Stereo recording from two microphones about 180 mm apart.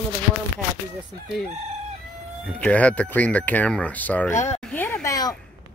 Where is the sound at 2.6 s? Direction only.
10° left (ahead or behind).